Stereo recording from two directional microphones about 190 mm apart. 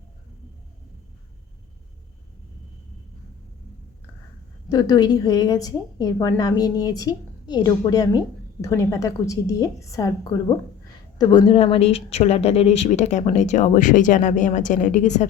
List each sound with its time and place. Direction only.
4.7 s a woman's voice: 20° left (ahead or behind); by 15.3 s 40° left (ahead or behind)